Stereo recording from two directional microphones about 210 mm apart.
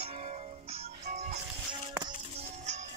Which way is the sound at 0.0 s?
30° right (ahead or behind).